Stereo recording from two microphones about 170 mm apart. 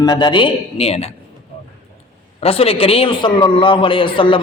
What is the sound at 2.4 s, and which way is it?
A man's voice, 35° left (ahead or behind).